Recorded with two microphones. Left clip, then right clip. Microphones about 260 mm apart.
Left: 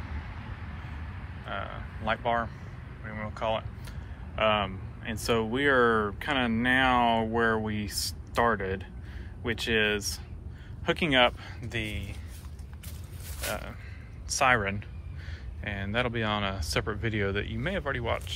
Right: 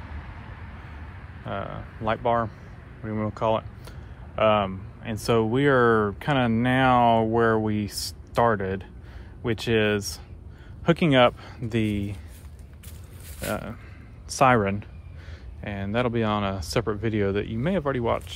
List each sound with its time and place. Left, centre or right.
1.5 s speech: right
13.4 s speech: right